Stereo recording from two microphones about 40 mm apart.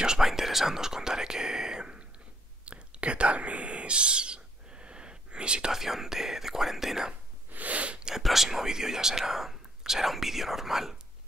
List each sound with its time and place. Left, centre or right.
0.2 s whispering: centre; by 5.7 s right
5.7 s speech: centre
7.5 s sneeze: right
8.2 s speech: centre